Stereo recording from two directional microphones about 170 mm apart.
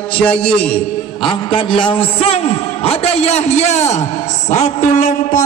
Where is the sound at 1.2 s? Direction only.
30° left (ahead or behind).